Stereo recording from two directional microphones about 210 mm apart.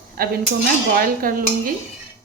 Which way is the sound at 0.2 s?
45° right (ahead or behind).